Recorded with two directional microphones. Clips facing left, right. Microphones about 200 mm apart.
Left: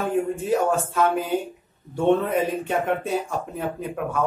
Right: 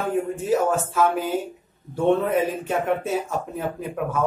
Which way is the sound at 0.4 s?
Centre (ahead or behind).